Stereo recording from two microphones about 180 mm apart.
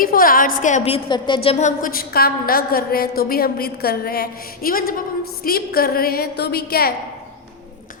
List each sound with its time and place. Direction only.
0.0 s a woman's voice: 50° left (ahead or behind); by 1.4 s 25° left (ahead or behind)
1.5 s a woman's voice: 40° left (ahead or behind); by 6.9 s 60° left (ahead or behind)